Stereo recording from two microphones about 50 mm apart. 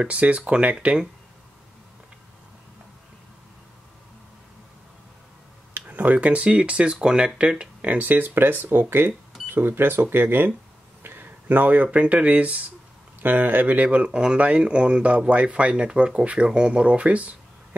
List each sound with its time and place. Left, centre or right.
0.0 s speech: right
5.8 s speech: right
8.0 s speech: right
13.2 s speech: right
13.8 s speech: right